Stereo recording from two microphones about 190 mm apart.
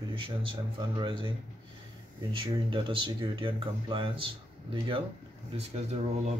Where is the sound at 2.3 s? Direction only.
25° right (ahead or behind).